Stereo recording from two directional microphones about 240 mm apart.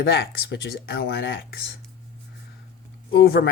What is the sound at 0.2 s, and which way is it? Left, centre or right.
Speech, left.